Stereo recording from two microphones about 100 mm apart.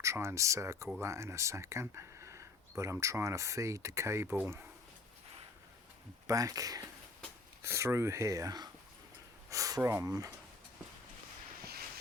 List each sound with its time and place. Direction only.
0.0 s speech: 25° right (ahead or behind)
6.2 s speech: 35° right (ahead or behind)
7.6 s speech: 25° right (ahead or behind)